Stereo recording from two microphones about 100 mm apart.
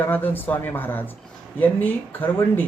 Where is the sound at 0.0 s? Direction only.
20° left (ahead or behind).